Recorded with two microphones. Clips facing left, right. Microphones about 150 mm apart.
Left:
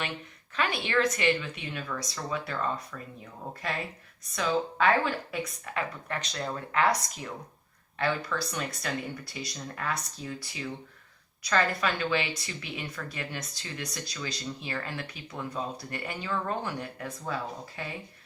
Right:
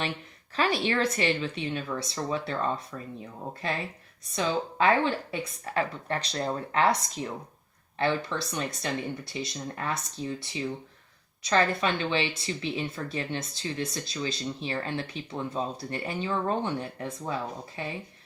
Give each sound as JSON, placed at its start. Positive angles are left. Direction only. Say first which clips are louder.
{"t": 0.5, "sound": "speech", "louder": "right 2 dB", "side_deg": -35}
{"t": 4.4, "sound": "speech", "louder": "right 1 dB", "side_deg": -25}